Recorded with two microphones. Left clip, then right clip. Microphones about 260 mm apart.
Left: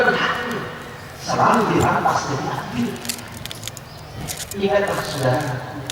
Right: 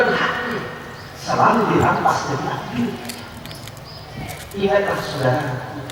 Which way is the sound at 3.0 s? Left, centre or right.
Centre.